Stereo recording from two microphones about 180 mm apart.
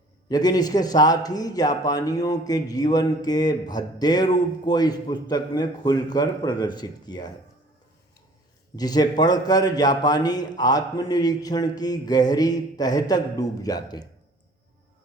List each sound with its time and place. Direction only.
0.3 s a man's voice: 20° left (ahead or behind)
8.7 s a man's voice: 20° left (ahead or behind)